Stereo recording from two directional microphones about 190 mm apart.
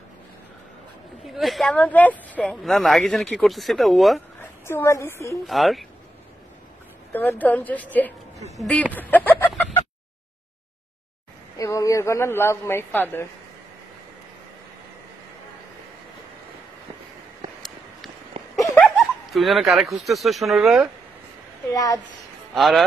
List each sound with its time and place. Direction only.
1.2 s speech: centre (ahead or behind)
4.6 s a woman's voice: 15° left (ahead or behind)
5.5 s speech: centre (ahead or behind)
7.1 s a woman's voice: 10° left (ahead or behind)
8.9 s chicken: 10° left (ahead or behind)
11.5 s a man's voice: 15° left (ahead or behind)
18.8 s speech: centre (ahead or behind)
21.7 s a child's voice: 20° left (ahead or behind)
22.5 s speech: centre (ahead or behind)